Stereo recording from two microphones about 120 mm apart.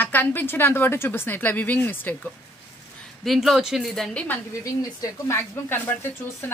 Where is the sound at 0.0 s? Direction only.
15° left (ahead or behind).